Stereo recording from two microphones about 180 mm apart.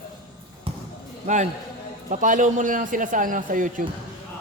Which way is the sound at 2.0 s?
45° right (ahead or behind).